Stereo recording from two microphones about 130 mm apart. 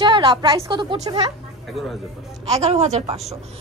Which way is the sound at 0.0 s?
35° right (ahead or behind).